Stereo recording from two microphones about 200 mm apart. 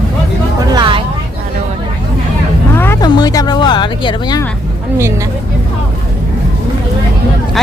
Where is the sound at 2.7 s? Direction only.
10° left (ahead or behind).